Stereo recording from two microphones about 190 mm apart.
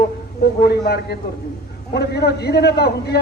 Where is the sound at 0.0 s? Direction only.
55° left (ahead or behind).